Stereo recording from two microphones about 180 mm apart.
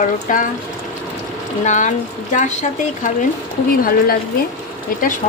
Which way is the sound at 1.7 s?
45° left (ahead or behind).